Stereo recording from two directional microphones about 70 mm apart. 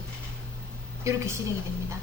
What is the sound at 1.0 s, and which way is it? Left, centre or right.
Speech, right.